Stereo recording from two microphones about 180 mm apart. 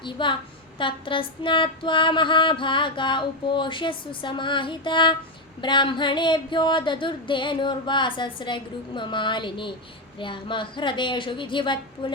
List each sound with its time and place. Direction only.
0.0 s female singing: 25° left (ahead or behind)